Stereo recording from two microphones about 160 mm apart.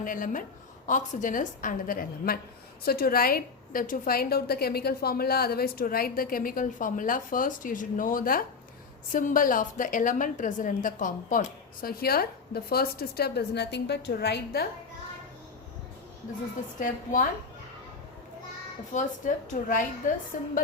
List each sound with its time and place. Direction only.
0.0 s a woman's voice: 55° left (ahead or behind); by 14.6 s 90° left
16.8 s a woman's voice: 55° left (ahead or behind)
18.9 s a woman's voice: 55° left (ahead or behind)